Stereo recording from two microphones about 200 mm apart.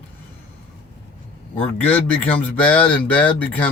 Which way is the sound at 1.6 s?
10° left (ahead or behind).